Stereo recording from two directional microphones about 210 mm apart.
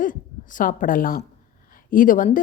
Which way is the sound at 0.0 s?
40° left (ahead or behind).